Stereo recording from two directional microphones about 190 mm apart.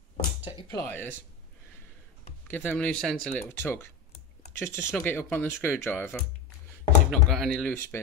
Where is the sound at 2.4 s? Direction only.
10° left (ahead or behind).